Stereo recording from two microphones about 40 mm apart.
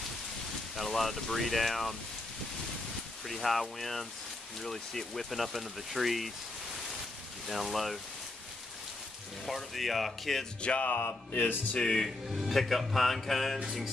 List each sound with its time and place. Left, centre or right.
0.7 s speech: centre
3.3 s speech: centre
7.4 s speech: centre
9.5 s speech: centre
10.6 s music: left
10.9 s music: left
11.8 s speech: centre
12.4 s speech: centre